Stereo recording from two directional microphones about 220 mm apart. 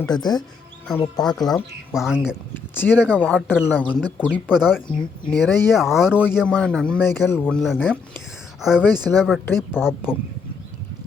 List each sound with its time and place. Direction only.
0.0 s speech: 20° left (ahead or behind)
1.2 s speech: centre (ahead or behind)
2.7 s speech: 10° left (ahead or behind)
6.1 s speech: 10° left (ahead or behind)
9.7 s speech: 10° left (ahead or behind)